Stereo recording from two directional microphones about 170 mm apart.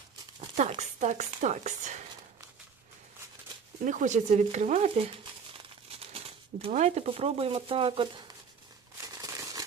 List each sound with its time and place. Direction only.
0.8 s speech: 45° right (ahead or behind)
3.8 s speech: 45° right (ahead or behind); by 8.1 s 30° right (ahead or behind)
9.0 s a sound: 20° right (ahead or behind)